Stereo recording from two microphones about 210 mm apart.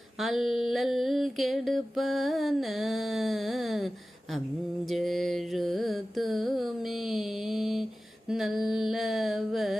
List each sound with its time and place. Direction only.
0.2 s mantra: centre (ahead or behind)